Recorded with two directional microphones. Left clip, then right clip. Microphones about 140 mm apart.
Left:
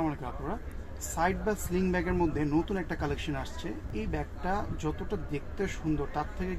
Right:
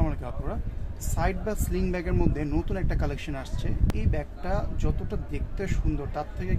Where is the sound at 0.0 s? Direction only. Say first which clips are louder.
Even; 30° right (ahead or behind).